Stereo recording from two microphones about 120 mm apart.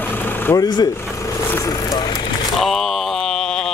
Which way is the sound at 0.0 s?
15° left (ahead or behind).